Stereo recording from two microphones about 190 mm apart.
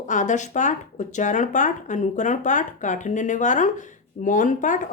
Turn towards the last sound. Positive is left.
turn(degrees=45)  # may be behind; listen again after turning